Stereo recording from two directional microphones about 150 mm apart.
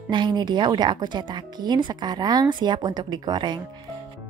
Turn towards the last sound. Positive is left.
turn(degrees=-30)  # may be behind; listen again after turning